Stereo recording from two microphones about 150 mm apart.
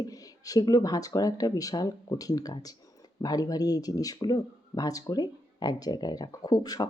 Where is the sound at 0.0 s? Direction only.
25° left (ahead or behind).